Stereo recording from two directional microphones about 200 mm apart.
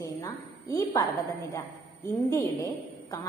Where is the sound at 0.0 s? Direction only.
15° left (ahead or behind).